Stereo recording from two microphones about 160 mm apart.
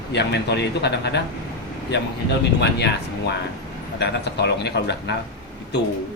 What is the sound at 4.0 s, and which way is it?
A man's voice, 90° left.